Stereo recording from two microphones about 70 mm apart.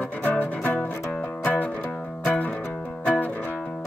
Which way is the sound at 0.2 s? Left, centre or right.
Left.